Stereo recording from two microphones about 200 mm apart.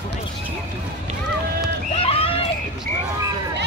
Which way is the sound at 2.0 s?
30° left (ahead or behind).